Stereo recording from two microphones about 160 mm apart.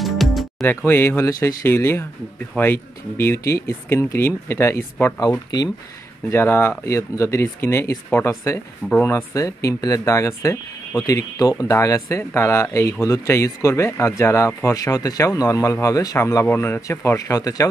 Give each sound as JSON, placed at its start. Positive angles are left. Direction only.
{"t": 0.0, "sound": "music", "side_deg": 0}
{"t": 0.7, "sound": "speech", "side_deg": 15}
{"t": 6.3, "sound": "speech", "side_deg": 15}